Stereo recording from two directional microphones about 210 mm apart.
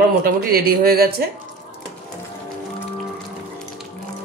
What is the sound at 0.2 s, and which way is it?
Speech, 45° right (ahead or behind).